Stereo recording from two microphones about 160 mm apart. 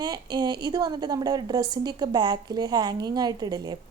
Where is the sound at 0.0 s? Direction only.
25° right (ahead or behind).